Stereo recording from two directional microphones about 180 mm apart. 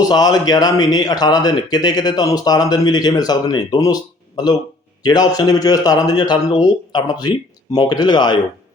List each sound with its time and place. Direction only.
0.1 s a man's voice: 20° left (ahead or behind)